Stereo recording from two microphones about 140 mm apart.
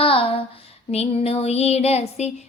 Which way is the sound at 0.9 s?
45° left (ahead or behind).